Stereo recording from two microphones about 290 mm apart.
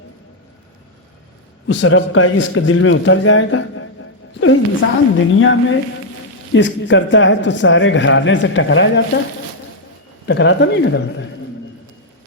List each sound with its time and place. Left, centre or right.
1.6 s a man's voice: left
10.2 s a man's voice: left